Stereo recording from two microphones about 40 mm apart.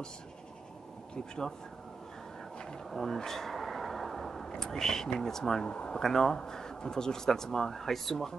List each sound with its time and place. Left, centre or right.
1.1 s speech: centre
2.9 s speech: centre
3.2 s a sound: centre
4.5 s speech: centre
5.6 s speech: left
5.9 s speech: centre